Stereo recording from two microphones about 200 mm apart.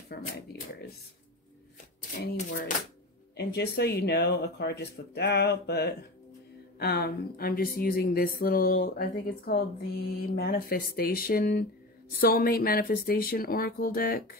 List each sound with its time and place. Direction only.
0.1 s speech: 55° left (ahead or behind)
3.3 s speech: 55° left (ahead or behind)